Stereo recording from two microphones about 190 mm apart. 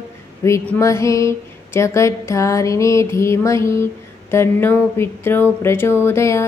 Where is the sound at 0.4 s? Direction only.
15° left (ahead or behind).